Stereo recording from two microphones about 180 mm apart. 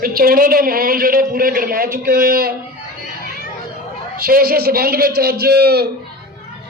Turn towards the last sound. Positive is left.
turn(degrees=-60)  # may be behind; listen again after turning